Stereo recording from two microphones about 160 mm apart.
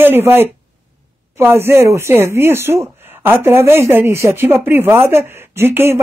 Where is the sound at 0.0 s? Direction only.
15° right (ahead or behind).